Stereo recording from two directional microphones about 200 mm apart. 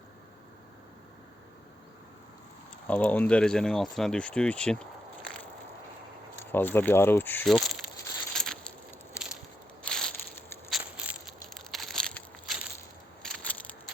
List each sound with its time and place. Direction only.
2.8 s speech: 5° left (ahead or behind)
8.3 s a sound: centre (ahead or behind)
9.8 s crushing: 5° left (ahead or behind)